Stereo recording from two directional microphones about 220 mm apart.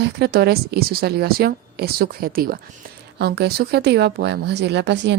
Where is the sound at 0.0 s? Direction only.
45° right (ahead or behind).